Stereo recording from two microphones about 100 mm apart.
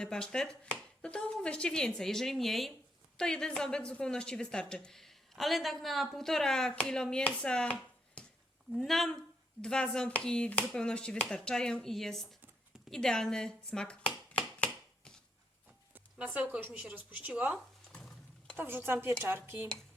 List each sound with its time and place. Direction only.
0.0 s a woman's voice: 10° left (ahead or behind)
14.3 s a sound: 10° left (ahead or behind)
15.9 s speech: 15° right (ahead or behind)
17.9 s horse: 10° left (ahead or behind)
18.5 s a woman's voice: 20° right (ahead or behind)